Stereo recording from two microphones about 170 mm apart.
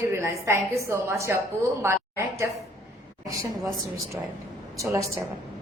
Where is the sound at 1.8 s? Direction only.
15° right (ahead or behind).